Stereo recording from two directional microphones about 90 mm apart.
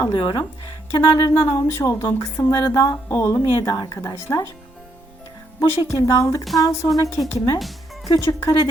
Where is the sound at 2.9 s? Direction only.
25° left (ahead or behind).